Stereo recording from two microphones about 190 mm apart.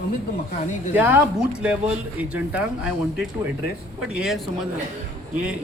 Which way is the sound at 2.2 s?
5° right (ahead or behind).